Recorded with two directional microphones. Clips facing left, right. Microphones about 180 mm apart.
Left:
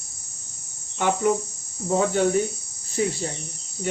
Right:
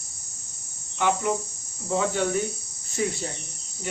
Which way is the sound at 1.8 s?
40° left (ahead or behind).